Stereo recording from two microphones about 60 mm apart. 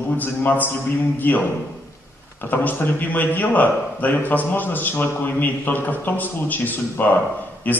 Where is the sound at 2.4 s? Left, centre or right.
Left.